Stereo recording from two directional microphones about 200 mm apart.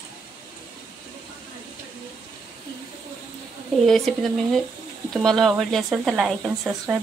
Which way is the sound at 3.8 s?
Centre (ahead or behind).